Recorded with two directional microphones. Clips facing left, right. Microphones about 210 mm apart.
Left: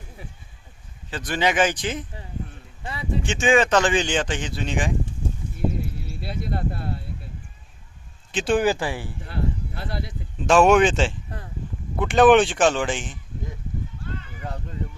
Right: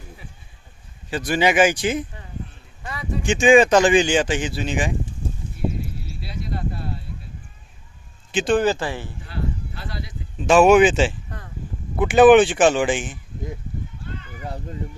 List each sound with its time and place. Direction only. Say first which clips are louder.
1.1 s speech: right 4 dB; 10° right (ahead or behind)
2.8 s speech: left 1 dB; 25° left (ahead or behind)
3.2 s speech: right 6 dB; 10° right (ahead or behind)
6.1 s cricket: left 2 dB; 55° left (ahead or behind)
8.4 s speech: right 1 dB; 10° left (ahead or behind)
9.2 s a sound: left 2 dB; 55° left (ahead or behind)
10.4 s speech: right 3 dB; 5° right (ahead or behind)